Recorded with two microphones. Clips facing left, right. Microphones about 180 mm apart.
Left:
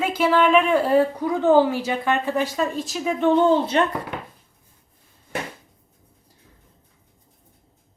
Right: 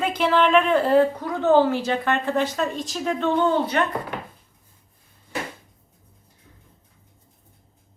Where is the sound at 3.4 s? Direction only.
25° left (ahead or behind).